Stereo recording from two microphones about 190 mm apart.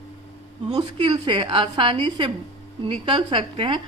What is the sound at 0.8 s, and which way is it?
Speech, 25° right (ahead or behind).